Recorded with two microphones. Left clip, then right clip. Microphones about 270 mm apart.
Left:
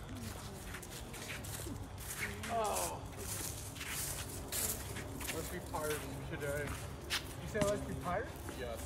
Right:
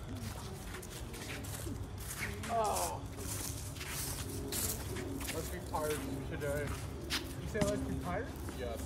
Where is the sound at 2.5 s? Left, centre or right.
Centre.